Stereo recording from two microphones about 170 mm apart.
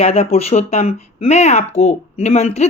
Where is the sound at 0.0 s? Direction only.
35° left (ahead or behind).